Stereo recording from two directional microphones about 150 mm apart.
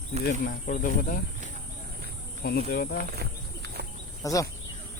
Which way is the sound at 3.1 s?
90° right.